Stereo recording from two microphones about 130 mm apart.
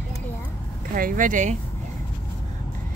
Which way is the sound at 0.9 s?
90° right.